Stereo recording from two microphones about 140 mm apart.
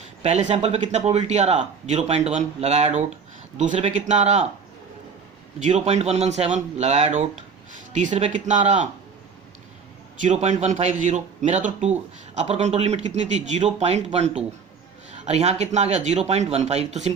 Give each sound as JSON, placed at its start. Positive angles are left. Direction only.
{"t": 0.2, "sound": "a man's voice", "side_deg": -50}
{"t": 5.5, "sound": "a man's voice", "side_deg": -60}
{"t": 10.2, "sound": "a man's voice", "side_deg": -55}